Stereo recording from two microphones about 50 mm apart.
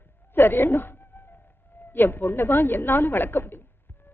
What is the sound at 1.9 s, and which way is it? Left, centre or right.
A man's voice, left.